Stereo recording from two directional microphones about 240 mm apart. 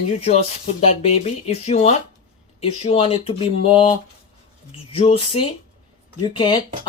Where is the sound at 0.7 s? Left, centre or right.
Left.